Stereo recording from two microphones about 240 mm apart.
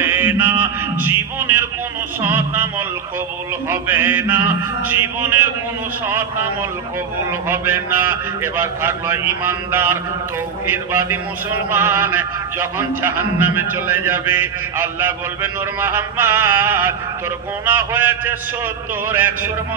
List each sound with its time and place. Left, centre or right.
0.0 s music: centre
2.2 s a sound: centre
3.6 s a man's voice: centre
7.4 s a man's voice: centre
9.5 s a man's voice: centre
11.7 s a man's voice: centre